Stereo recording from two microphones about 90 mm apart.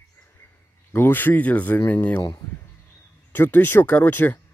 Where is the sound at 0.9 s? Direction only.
25° left (ahead or behind).